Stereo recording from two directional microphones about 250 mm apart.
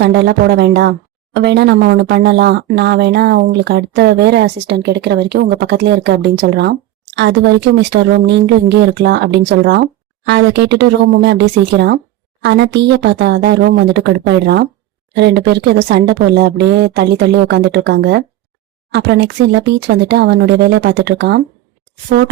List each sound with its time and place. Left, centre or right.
0.0 s speech: right